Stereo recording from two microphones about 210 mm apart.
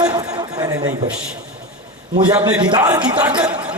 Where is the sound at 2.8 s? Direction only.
15° right (ahead or behind).